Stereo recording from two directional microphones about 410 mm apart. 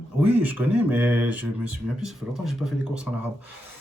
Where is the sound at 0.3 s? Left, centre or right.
Centre.